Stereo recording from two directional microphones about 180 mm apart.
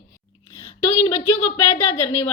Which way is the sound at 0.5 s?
30° left (ahead or behind).